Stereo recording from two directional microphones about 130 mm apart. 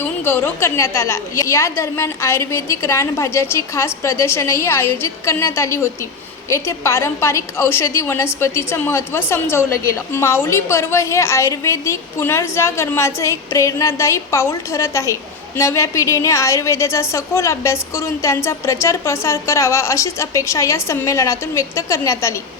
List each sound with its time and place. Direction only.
0.0 s a woman's voice: 15° left (ahead or behind)